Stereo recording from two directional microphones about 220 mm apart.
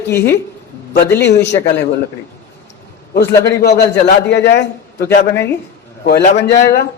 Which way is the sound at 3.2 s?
50° left (ahead or behind).